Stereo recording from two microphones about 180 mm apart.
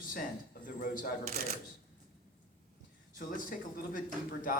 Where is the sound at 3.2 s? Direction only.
50° left (ahead or behind).